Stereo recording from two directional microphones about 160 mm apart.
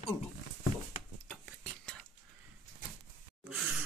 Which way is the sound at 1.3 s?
5° left (ahead or behind).